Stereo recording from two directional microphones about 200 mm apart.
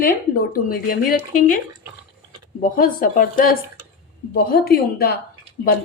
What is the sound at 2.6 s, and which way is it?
A woman's voice, 45° left (ahead or behind).